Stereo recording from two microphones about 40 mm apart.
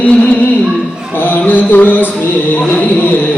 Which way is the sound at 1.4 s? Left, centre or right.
Left.